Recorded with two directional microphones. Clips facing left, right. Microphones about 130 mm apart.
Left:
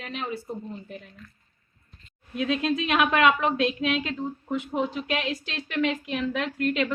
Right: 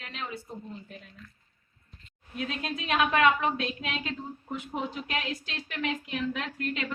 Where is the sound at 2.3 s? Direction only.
90° left.